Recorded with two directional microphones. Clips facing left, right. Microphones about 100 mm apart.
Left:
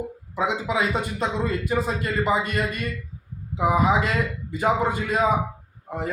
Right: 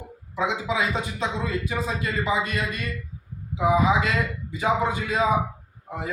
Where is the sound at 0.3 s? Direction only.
45° left (ahead or behind).